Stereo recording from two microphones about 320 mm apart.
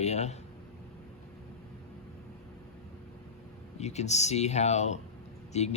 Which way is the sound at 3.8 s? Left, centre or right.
Left.